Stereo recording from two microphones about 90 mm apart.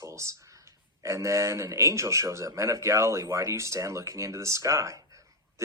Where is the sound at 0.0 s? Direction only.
30° right (ahead or behind).